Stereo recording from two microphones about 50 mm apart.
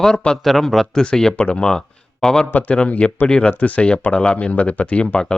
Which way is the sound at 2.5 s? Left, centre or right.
Left.